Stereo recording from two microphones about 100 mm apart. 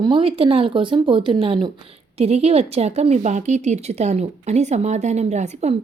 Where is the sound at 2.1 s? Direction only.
90° right.